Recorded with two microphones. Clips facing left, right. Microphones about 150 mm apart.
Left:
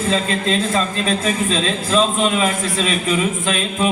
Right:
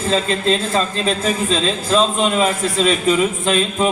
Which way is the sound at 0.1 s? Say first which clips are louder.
Right 3 dB; 35° right (ahead or behind).